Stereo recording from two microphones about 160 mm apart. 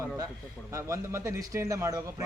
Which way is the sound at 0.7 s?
20° right (ahead or behind).